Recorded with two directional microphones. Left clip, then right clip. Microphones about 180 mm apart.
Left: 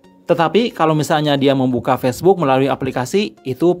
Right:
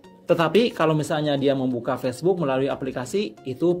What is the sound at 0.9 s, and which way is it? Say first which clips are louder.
A man's voice: left 7 dB; 35° left (ahead or behind).